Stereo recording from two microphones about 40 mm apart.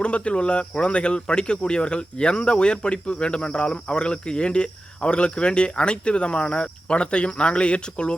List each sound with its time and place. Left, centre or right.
0.0 s speech: left